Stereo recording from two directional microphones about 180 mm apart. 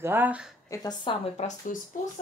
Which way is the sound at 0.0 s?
10° right (ahead or behind).